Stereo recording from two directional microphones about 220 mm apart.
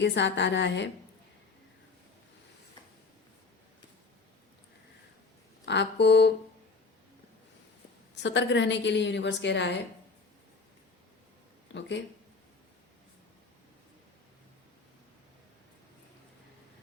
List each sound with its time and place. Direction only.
0.0 s a woman's voice: 50° left (ahead or behind)
5.6 s a woman's voice: 50° left (ahead or behind)
8.1 s a woman's voice: 55° left (ahead or behind)
11.7 s a woman's voice: 55° left (ahead or behind)